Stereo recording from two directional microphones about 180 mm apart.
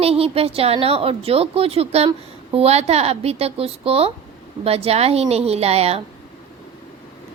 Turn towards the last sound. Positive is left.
turn(degrees=-35)  # may be behind; listen again after turning